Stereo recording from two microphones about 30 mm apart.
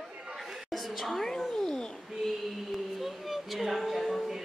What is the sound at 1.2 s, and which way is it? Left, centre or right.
Cat, centre.